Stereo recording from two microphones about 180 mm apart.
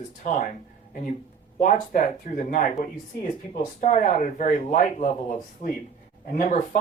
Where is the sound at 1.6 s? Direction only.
45° left (ahead or behind).